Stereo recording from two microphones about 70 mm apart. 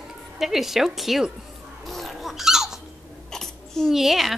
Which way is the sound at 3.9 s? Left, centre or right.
Centre.